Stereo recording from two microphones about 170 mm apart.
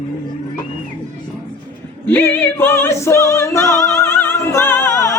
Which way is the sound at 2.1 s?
10° left (ahead or behind).